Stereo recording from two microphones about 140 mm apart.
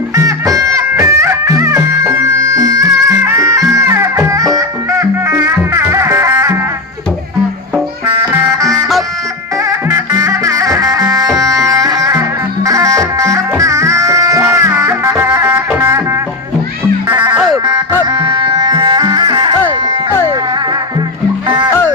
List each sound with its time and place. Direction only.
0.2 s music: 25° right (ahead or behind)
5.3 s music: 15° right (ahead or behind)
8.2 s music: 20° right (ahead or behind)
17.3 s music: 5° right (ahead or behind)
18.0 s music: 30° right (ahead or behind)
21.7 s music: 15° left (ahead or behind)